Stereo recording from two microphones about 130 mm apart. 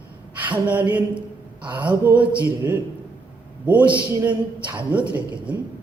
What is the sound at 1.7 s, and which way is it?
A man's voice, 10° right (ahead or behind).